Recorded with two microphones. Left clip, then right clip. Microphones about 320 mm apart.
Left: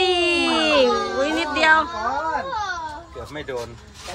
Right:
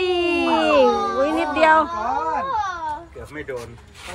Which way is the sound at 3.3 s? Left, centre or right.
Left.